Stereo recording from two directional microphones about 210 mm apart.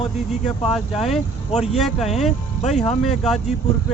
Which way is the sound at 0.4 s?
Centre (ahead or behind).